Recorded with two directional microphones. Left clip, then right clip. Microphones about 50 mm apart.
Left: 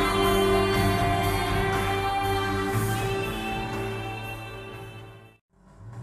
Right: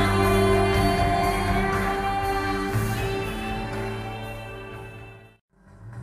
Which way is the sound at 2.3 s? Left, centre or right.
Right.